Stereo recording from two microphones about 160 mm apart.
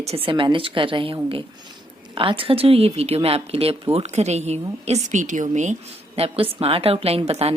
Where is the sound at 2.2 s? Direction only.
35° right (ahead or behind); by 5.8 s 50° right (ahead or behind).